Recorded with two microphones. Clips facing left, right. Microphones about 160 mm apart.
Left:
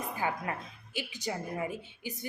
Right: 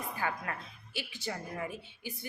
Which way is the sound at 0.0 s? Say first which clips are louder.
Left 3 dB; 20° left (ahead or behind).